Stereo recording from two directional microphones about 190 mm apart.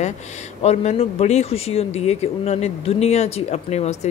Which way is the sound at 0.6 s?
35° left (ahead or behind).